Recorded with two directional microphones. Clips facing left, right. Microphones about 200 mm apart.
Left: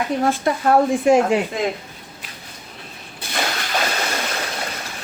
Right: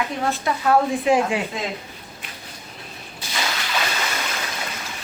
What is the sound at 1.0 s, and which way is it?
Speech, 45° left (ahead or behind).